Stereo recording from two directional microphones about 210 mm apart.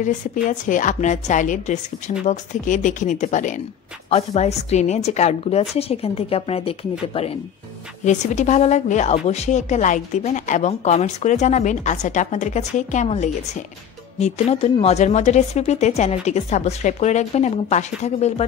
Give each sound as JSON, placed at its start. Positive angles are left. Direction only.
{"t": 0.0, "sound": "a woman's voice", "side_deg": 35}